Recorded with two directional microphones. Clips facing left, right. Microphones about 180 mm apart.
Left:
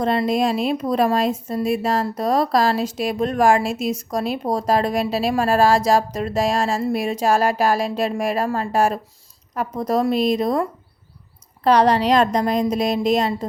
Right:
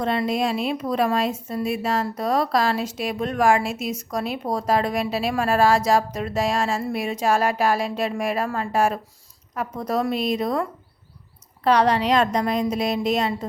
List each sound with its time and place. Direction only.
0.0 s speech: 40° left (ahead or behind)
11.6 s speech: 40° left (ahead or behind)